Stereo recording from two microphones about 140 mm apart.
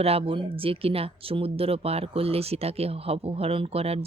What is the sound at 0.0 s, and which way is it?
Speech, 45° right (ahead or behind).